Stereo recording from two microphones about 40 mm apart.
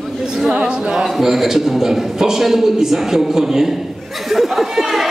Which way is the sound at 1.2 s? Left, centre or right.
Centre.